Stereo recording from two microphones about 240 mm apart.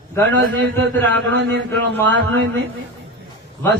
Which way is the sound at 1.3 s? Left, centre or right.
Right.